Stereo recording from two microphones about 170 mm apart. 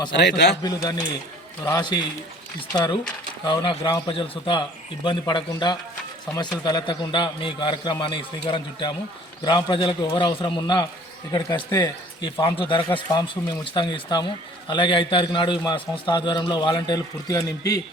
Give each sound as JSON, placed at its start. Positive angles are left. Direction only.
{"t": 0.2, "sound": "a man's voice", "side_deg": 80}
{"t": 0.6, "sound": "speech", "side_deg": 25}